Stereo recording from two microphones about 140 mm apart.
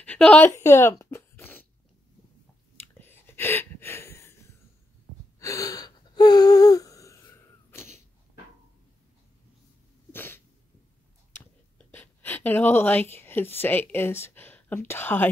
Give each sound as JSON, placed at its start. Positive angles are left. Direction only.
{"t": 0.0, "sound": "speech", "side_deg": 10}
{"t": 0.6, "sound": "a sound", "side_deg": 20}
{"t": 3.0, "sound": "a sound", "side_deg": 15}
{"t": 5.4, "sound": "gasp", "side_deg": 25}
{"t": 7.7, "sound": "sneeze", "side_deg": 20}
{"t": 10.1, "sound": "cough", "side_deg": 15}
{"t": 11.3, "sound": "speech", "side_deg": 15}